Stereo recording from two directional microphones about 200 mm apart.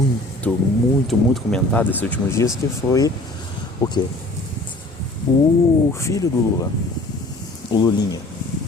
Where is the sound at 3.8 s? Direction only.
20° left (ahead or behind).